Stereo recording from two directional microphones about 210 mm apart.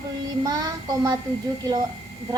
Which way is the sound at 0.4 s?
20° right (ahead or behind).